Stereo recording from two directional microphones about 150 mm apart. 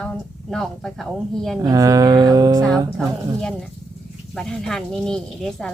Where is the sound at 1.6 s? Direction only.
25° right (ahead or behind).